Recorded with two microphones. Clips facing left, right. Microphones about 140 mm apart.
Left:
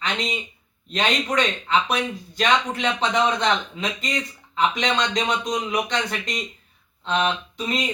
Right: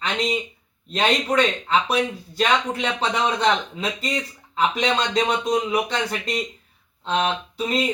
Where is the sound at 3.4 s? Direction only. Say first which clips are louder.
Right 2 dB; 35° right (ahead or behind).